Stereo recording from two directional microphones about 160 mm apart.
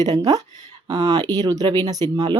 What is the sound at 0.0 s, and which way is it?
Speech, 25° right (ahead or behind).